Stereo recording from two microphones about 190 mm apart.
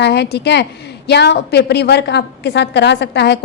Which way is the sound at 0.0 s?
60° left (ahead or behind).